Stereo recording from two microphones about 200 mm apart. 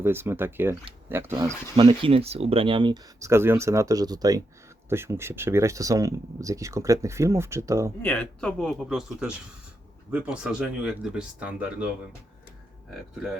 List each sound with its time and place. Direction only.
0.0 s speech: 10° right (ahead or behind)
1.7 s speech: 25° right (ahead or behind)
8.0 s speech: 5° left (ahead or behind)